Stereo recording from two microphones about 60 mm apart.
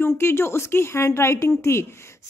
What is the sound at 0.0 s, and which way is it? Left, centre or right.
A woman's voice, left.